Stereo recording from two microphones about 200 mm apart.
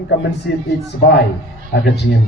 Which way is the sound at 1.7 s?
55° left (ahead or behind).